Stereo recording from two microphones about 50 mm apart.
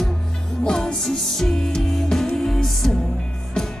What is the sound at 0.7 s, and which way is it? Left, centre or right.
Music, centre.